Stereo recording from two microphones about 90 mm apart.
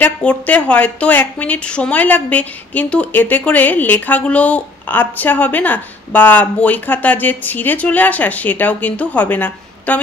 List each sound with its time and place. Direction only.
0.0 s a woman's voice: 15° left (ahead or behind)